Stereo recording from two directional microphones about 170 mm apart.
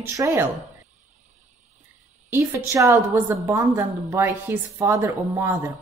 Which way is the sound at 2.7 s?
15° right (ahead or behind).